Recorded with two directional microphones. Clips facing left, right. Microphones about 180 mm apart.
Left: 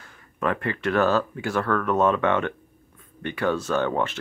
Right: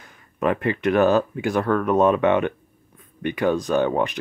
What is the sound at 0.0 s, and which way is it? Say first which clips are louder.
Speech: right 4 dB; 20° right (ahead or behind).